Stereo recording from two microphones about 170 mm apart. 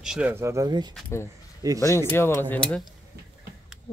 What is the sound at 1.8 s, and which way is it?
Speech, 15° left (ahead or behind).